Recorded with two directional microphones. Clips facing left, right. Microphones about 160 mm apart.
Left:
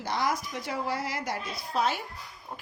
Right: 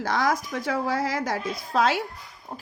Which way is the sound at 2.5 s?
30° right (ahead or behind).